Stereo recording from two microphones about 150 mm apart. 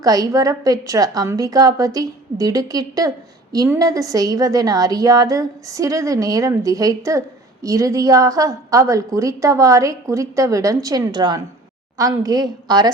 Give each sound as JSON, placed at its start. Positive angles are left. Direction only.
{"t": 0.0, "sound": "a woman's voice", "side_deg": -25}